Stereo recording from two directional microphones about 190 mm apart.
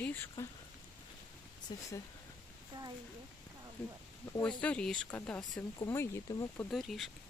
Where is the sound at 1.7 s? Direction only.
20° left (ahead or behind).